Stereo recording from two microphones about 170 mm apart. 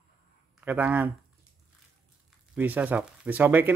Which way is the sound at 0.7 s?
10° right (ahead or behind).